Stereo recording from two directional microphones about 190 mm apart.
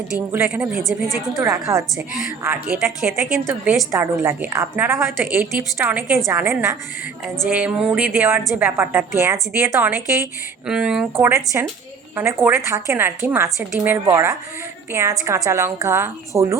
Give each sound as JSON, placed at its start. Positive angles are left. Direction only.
{"t": 0.1, "sound": "a woman's voice", "side_deg": -10}
{"t": 1.4, "sound": "a woman's voice", "side_deg": -15}
{"t": 15.4, "sound": "a woman's voice", "side_deg": -15}